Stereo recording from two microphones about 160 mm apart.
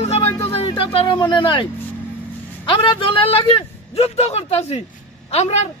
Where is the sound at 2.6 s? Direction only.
30° left (ahead or behind).